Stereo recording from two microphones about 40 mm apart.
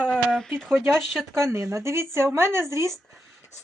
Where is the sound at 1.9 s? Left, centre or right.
Right.